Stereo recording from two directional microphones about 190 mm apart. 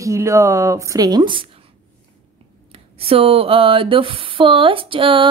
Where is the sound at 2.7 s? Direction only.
30° right (ahead or behind).